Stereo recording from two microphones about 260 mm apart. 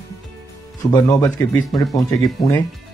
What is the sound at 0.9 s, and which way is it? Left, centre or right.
Speech, centre.